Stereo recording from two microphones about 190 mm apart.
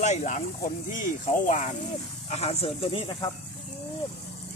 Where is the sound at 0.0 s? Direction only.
40° left (ahead or behind).